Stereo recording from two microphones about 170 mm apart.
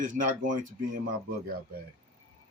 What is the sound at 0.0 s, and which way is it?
Speech, 50° right (ahead or behind).